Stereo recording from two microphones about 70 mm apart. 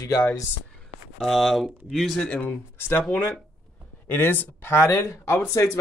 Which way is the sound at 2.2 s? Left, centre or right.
Centre.